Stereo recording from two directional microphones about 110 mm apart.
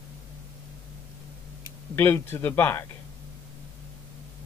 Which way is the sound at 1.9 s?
20° left (ahead or behind).